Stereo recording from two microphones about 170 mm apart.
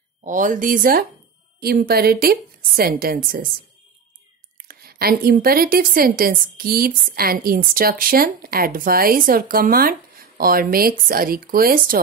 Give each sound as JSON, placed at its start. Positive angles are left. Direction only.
{"t": 0.2, "sound": "a woman's voice", "side_deg": -50}
{"t": 4.6, "sound": "a woman's voice", "side_deg": -60}